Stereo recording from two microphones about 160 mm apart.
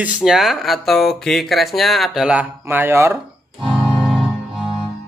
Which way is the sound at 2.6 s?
15° right (ahead or behind).